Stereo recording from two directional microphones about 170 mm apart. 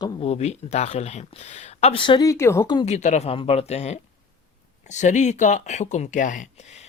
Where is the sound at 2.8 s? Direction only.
40° left (ahead or behind).